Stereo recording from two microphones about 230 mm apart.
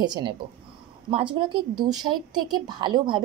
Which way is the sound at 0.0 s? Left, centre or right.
Centre.